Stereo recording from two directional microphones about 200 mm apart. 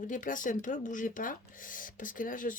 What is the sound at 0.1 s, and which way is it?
Speech, 40° left (ahead or behind).